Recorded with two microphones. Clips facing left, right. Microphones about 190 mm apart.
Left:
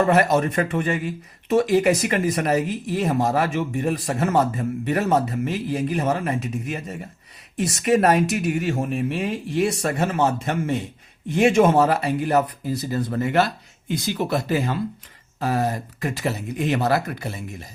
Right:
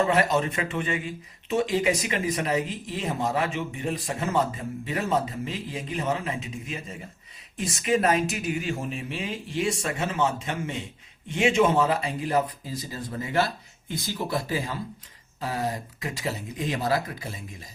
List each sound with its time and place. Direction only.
0.0 s speech: 65° left (ahead or behind)